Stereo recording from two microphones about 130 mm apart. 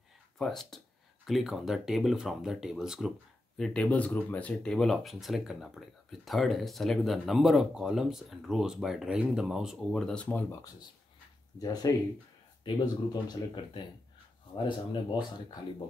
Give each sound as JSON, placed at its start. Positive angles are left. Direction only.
{"t": 0.4, "sound": "speech", "side_deg": 0}
{"t": 11.5, "sound": "speech", "side_deg": 30}